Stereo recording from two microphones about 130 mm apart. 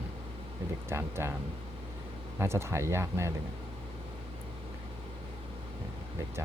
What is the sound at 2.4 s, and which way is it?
Speech, 20° right (ahead or behind).